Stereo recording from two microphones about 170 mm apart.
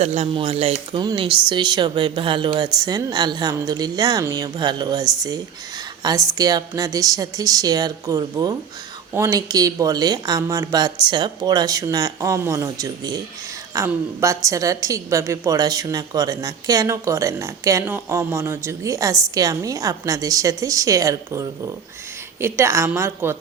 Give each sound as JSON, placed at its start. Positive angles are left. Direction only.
{"t": 0.0, "sound": "a woman's voice", "side_deg": -40}